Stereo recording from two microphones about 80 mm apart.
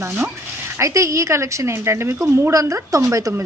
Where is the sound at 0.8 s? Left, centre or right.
Right.